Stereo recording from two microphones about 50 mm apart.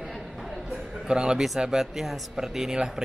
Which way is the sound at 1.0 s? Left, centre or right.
Centre.